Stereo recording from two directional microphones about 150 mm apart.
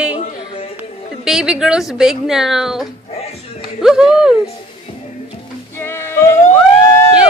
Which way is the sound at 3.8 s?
5° right (ahead or behind).